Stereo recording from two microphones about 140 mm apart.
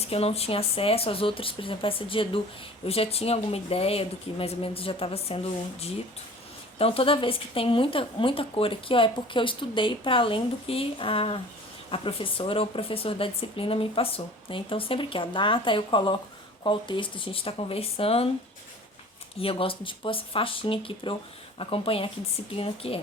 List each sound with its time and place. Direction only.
0.0 s a woman's voice: 45° left (ahead or behind)
6.7 s a woman's voice: 40° left (ahead or behind)
19.4 s a woman's voice: 40° left (ahead or behind)